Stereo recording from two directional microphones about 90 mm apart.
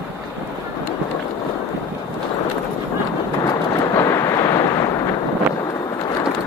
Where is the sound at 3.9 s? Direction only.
35° left (ahead or behind).